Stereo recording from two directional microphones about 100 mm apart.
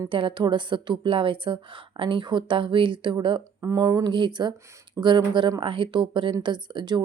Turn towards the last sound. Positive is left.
turn(degrees=-50)  # may be behind; listen again after turning